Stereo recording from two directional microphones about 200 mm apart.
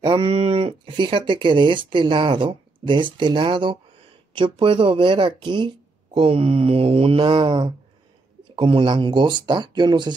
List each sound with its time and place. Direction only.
0.0 s speech: 25° right (ahead or behind)